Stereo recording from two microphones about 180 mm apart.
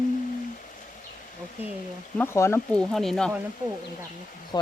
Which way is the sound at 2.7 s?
Centre (ahead or behind).